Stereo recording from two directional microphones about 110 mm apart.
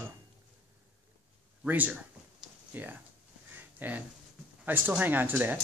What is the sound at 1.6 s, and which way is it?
Speech, 15° right (ahead or behind).